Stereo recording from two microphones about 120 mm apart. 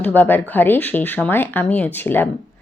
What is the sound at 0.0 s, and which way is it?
Speech, 15° left (ahead or behind).